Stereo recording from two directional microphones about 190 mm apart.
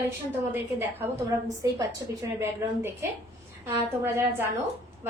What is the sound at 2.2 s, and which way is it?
A woman's voice, 15° right (ahead or behind).